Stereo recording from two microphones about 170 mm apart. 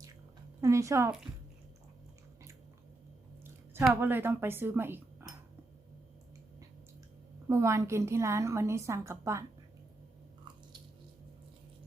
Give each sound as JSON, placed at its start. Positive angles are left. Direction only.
{"t": 0.6, "sound": "a woman's voice", "side_deg": -15}
{"t": 4.0, "sound": "speech", "side_deg": -10}
{"t": 7.4, "sound": "a woman's voice", "side_deg": -15}